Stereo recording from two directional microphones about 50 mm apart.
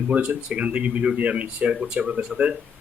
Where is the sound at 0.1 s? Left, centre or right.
Centre.